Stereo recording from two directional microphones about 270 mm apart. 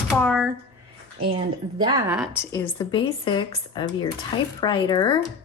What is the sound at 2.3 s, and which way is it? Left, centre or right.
A woman's voice, centre.